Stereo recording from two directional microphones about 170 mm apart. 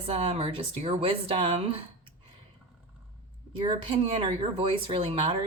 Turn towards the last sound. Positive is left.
turn(degrees=-35)  # may be behind; listen again after turning